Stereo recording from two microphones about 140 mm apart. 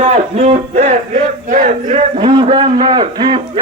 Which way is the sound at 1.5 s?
60° right (ahead or behind).